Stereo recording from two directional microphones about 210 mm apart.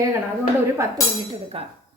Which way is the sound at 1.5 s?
30° right (ahead or behind).